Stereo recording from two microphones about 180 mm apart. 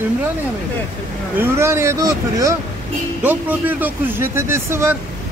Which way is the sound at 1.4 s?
15° right (ahead or behind).